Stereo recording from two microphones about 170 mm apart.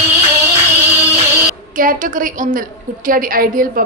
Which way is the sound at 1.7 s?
55° right (ahead or behind).